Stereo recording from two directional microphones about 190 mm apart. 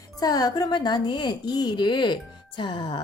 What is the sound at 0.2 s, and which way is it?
Speech, 20° left (ahead or behind).